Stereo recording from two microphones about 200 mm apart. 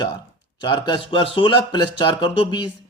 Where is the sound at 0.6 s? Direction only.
25° left (ahead or behind).